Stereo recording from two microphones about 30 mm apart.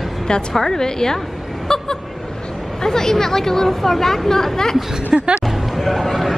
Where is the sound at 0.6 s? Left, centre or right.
Centre.